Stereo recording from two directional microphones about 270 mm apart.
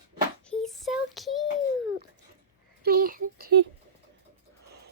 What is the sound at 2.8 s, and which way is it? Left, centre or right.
Speech, right.